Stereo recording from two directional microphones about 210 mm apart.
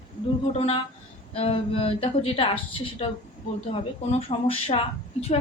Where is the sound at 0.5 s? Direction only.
30° left (ahead or behind).